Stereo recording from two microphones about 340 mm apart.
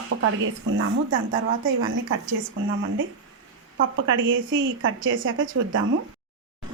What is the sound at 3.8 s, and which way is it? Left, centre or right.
Speech, right.